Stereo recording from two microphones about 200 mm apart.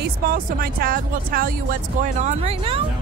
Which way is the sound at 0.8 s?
45° right (ahead or behind).